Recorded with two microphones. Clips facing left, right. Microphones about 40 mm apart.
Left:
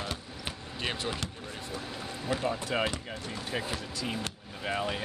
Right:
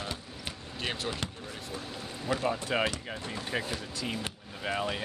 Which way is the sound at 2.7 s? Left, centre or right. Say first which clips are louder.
Right 1 dB; centre.